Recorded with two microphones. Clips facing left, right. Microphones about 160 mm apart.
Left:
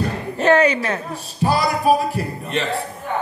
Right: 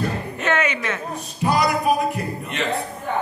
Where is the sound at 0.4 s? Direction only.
35° left (ahead or behind).